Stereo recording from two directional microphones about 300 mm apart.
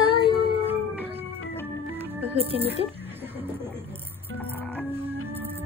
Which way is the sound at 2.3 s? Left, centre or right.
Centre.